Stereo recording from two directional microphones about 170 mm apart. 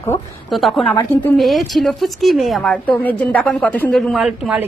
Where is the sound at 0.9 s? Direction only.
10° left (ahead or behind).